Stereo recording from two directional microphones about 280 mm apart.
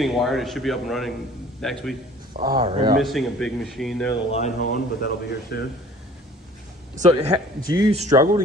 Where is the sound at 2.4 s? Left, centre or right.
Right.